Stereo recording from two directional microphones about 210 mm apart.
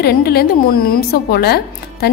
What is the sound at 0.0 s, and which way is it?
A woman's voice, 50° left (ahead or behind).